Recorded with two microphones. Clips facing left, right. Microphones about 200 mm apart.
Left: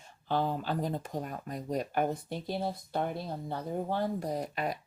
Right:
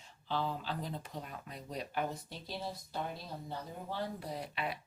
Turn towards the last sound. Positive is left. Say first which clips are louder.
# left 6 dB
turn(degrees=45)  # may be behind; listen again after turning